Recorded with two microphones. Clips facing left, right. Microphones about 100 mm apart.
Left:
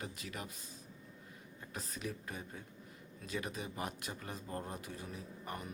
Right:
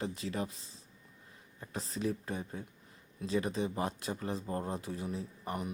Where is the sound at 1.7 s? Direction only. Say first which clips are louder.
Right 8 dB; 30° right (ahead or behind).